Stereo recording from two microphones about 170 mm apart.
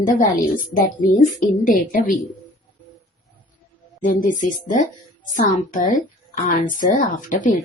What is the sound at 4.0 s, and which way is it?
Speech, 50° left (ahead or behind).